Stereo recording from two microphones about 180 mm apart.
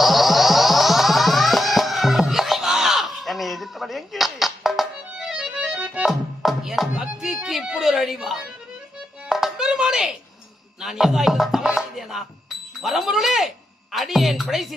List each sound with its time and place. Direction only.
0.0 s music: centre (ahead or behind)
12.8 s a sound: centre (ahead or behind)
13.9 s music: centre (ahead or behind)